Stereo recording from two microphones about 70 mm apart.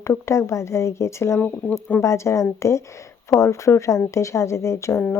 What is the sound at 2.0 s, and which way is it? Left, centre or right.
Cricket, left.